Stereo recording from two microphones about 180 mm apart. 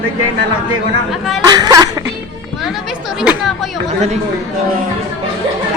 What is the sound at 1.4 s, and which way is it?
Speech, 25° right (ahead or behind).